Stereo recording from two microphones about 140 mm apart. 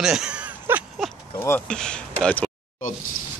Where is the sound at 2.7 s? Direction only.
70° left (ahead or behind).